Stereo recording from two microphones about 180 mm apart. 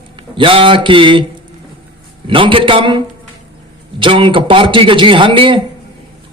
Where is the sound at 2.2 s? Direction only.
30° right (ahead or behind).